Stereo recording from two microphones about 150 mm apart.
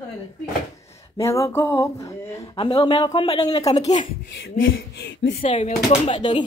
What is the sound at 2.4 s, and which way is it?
Speech, 35° left (ahead or behind).